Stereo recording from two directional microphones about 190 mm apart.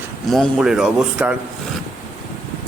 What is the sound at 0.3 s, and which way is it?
Speech, centre (ahead or behind).